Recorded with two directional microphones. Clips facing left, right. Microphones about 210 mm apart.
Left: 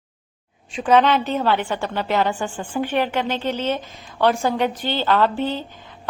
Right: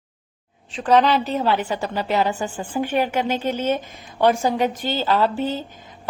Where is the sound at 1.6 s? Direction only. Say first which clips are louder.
Even; 40° right (ahead or behind).